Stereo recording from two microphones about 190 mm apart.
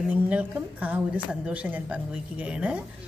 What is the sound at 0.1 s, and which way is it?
A woman's voice, 10° right (ahead or behind).